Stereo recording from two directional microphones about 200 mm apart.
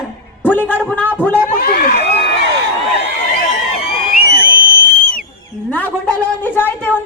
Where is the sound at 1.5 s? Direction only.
45° left (ahead or behind).